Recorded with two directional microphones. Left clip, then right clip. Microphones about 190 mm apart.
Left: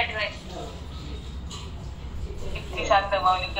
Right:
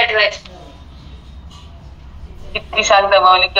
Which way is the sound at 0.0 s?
50° right (ahead or behind).